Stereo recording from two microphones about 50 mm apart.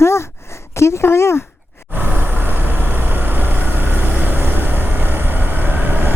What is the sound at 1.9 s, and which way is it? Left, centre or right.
Vehicle, right.